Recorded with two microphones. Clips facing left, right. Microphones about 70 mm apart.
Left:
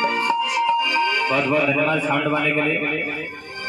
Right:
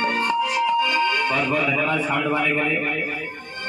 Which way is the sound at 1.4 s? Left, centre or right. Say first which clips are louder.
Left 3 dB; centre.